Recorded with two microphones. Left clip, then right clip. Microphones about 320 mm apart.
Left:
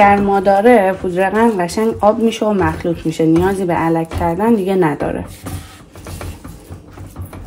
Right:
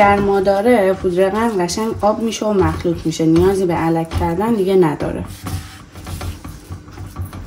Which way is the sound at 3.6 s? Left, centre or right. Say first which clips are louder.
Left 2 dB; centre.